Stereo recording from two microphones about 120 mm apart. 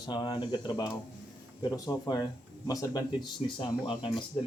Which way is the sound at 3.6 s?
45° left (ahead or behind).